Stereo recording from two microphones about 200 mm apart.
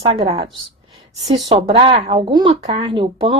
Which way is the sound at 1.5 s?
25° right (ahead or behind).